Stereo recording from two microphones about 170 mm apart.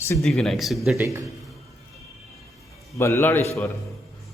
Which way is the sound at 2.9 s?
15° left (ahead or behind).